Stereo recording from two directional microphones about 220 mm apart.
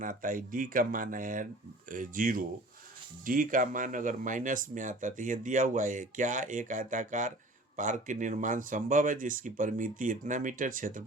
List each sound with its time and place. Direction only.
0.0 s speech: 40° right (ahead or behind)